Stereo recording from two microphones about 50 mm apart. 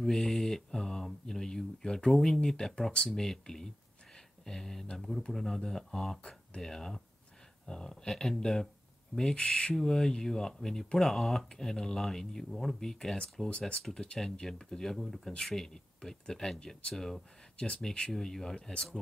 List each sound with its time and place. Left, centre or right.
0.0 s speech: centre
13.5 s speech: left